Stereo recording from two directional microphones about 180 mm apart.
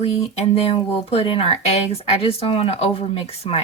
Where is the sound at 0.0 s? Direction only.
35° left (ahead or behind).